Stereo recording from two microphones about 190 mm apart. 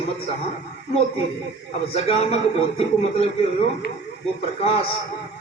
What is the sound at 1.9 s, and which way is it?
Speech, 30° left (ahead or behind).